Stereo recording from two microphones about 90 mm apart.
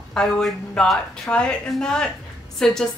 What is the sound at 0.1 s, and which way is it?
A woman's voice, 5° left (ahead or behind).